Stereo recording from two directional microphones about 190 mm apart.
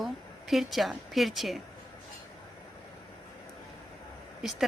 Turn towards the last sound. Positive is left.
turn(degrees=0)  # may be behind; listen again after turning